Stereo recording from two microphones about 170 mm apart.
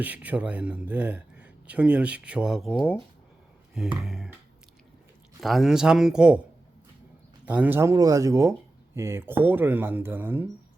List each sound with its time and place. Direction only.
0.0 s speech: 10° right (ahead or behind)
4.0 s a sound: 5° right (ahead or behind)
5.4 s speech: centre (ahead or behind)
7.4 s speech: 10° right (ahead or behind)